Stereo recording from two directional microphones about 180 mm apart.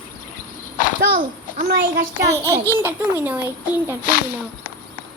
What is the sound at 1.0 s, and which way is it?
Speech, 50° right (ahead or behind).